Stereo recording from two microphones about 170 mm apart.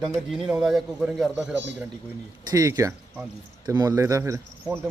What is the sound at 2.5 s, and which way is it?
Speech, 20° right (ahead or behind).